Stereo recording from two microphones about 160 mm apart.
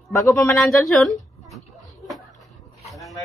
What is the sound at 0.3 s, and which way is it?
Speech, 15° left (ahead or behind).